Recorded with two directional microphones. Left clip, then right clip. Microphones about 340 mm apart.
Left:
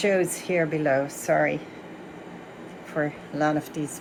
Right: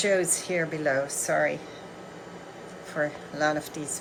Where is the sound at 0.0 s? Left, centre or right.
Centre.